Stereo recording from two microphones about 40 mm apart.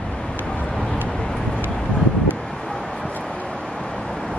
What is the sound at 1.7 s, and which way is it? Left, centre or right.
Wind, centre.